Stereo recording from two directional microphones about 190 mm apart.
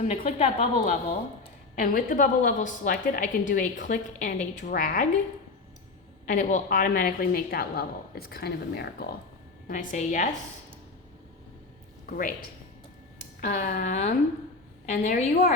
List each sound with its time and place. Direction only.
0.0 s a woman's voice: 40° left (ahead or behind)
1.7 s a woman's voice: 45° left (ahead or behind)
6.2 s a woman's voice: 40° left (ahead or behind); by 9.0 s 55° left (ahead or behind)
9.6 s a woman's voice: 45° left (ahead or behind)
12.0 s speech: 45° left (ahead or behind)
13.4 s a woman's voice: 40° left (ahead or behind)